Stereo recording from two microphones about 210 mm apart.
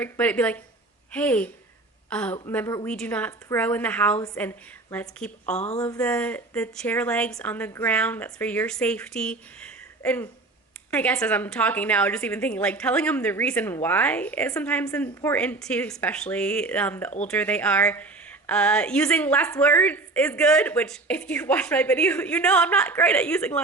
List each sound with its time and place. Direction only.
0.0 s speech: 5° left (ahead or behind)
5.5 s speech: 30° left (ahead or behind)
6.0 s speech: 5° left (ahead or behind)